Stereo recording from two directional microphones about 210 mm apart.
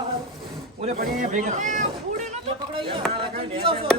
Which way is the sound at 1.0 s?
35° right (ahead or behind).